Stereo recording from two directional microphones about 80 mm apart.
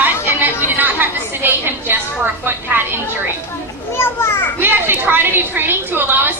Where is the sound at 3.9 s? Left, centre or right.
Left.